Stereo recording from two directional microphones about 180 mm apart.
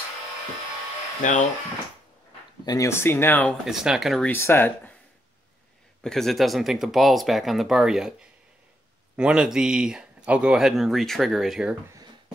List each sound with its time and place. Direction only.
1.2 s speech: 45° left (ahead or behind)
2.6 s speech: 20° left (ahead or behind)
3.6 s speech: centre (ahead or behind)
4.3 s speech: 10° left (ahead or behind)
6.0 s speech: centre (ahead or behind)